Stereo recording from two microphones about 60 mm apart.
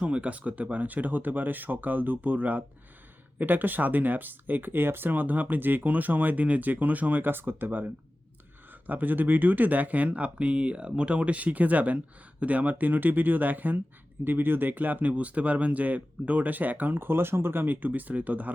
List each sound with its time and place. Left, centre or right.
0.0 s speech: right